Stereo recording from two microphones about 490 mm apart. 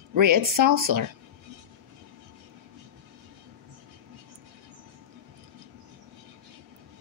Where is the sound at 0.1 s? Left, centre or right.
Right.